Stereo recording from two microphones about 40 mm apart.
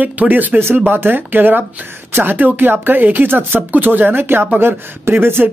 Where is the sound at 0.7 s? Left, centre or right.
Right.